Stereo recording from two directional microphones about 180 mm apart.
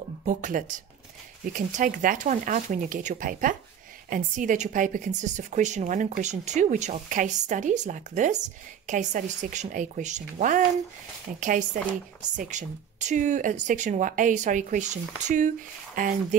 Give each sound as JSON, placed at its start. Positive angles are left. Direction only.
{"t": 0.2, "sound": "a woman's voice", "side_deg": -45}